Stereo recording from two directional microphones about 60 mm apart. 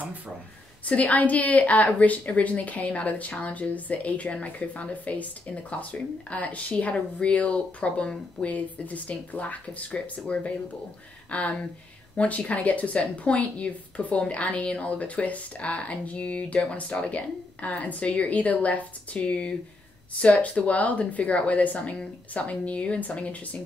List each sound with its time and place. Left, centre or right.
0.8 s speech: left